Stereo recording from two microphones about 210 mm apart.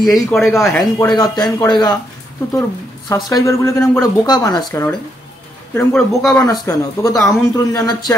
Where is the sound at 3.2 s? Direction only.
15° left (ahead or behind).